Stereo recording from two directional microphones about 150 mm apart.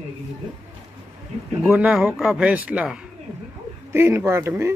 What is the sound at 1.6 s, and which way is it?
A man's voice, 10° right (ahead or behind).